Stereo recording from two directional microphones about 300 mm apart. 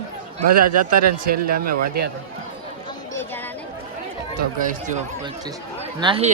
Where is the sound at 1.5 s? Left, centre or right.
Right.